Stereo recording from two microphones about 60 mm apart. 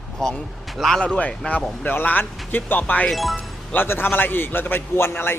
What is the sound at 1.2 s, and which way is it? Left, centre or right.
A man's voice, left.